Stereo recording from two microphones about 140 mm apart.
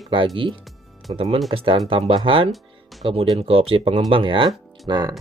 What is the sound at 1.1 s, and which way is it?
Speech, 45° right (ahead or behind).